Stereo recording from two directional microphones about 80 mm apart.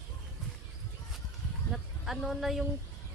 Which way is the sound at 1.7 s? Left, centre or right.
Centre.